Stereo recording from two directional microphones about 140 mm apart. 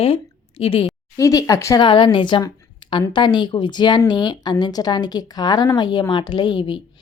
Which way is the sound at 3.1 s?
35° left (ahead or behind).